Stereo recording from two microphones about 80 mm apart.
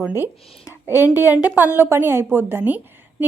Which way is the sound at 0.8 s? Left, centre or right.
Left.